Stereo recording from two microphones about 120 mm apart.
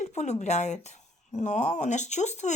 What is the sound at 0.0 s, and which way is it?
Speech, 75° left (ahead or behind).